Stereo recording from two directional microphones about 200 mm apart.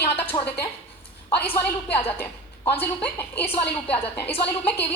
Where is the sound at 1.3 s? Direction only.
10° left (ahead or behind).